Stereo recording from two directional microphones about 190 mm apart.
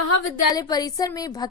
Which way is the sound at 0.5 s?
20° left (ahead or behind).